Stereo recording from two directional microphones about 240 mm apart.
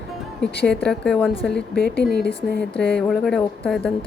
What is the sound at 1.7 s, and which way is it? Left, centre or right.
Speech, left.